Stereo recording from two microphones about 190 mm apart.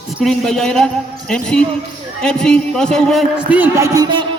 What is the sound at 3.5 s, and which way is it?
Speech, 10° right (ahead or behind).